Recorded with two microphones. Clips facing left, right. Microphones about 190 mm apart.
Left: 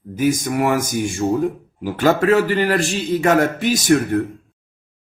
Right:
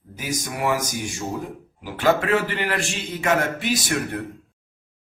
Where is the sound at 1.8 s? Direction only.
40° left (ahead or behind).